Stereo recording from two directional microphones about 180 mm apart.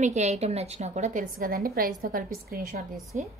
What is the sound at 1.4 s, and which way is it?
A woman's voice, 55° right (ahead or behind).